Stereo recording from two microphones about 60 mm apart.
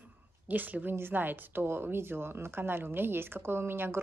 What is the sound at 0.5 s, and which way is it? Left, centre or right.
A woman's voice, right.